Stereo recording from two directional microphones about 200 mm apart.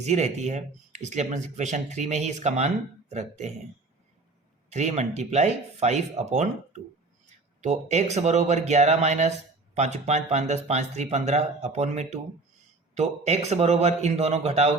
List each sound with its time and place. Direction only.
0.0 s speech: 35° right (ahead or behind)
4.7 s speech: 35° right (ahead or behind)